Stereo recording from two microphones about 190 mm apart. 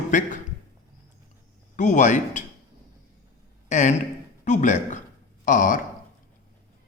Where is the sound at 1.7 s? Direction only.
40° left (ahead or behind).